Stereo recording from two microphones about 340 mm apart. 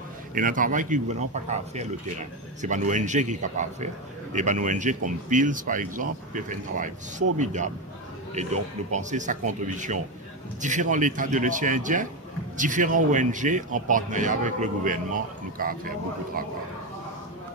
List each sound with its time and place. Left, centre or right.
0.3 s speech: right
8.9 s speech: right